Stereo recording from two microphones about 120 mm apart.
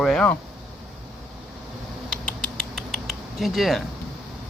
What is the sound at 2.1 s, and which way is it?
Rodents, 5° left (ahead or behind).